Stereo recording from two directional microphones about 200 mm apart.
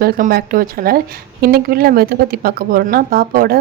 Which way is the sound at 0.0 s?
50° right (ahead or behind).